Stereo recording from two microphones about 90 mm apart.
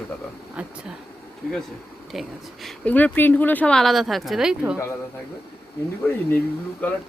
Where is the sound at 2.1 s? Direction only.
Centre (ahead or behind).